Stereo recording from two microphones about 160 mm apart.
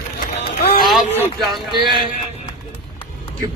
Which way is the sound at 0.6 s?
70° left (ahead or behind).